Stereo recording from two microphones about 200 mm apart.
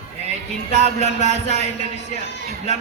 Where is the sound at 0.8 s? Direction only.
35° right (ahead or behind).